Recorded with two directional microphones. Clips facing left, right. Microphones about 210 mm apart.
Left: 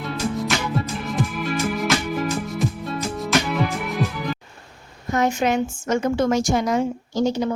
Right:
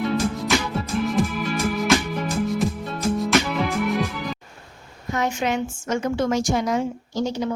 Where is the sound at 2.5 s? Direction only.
Centre (ahead or behind).